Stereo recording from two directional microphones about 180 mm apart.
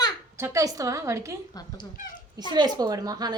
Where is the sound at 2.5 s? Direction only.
25° right (ahead or behind).